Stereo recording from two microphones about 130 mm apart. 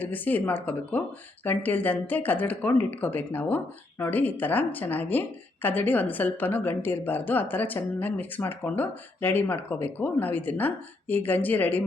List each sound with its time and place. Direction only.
0.0 s a woman's voice: 15° left (ahead or behind)